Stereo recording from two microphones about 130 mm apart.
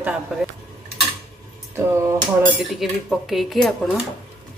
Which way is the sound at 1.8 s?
20° right (ahead or behind).